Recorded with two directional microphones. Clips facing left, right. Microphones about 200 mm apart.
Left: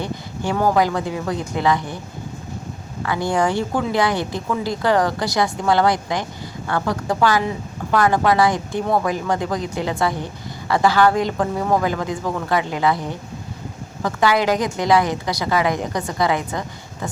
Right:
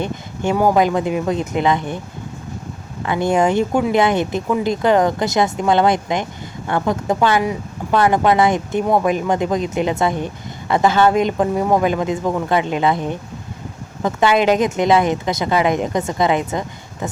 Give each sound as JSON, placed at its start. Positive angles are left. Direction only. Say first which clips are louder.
{"t": 0.0, "sound": "speech", "louder": "right 3 dB", "side_deg": -20}
{"t": 3.0, "sound": "speech", "louder": "right 4 dB", "side_deg": -20}